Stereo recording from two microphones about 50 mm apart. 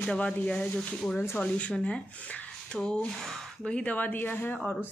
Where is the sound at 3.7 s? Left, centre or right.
Left.